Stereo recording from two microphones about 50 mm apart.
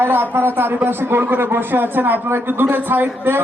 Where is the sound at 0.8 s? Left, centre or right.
Right.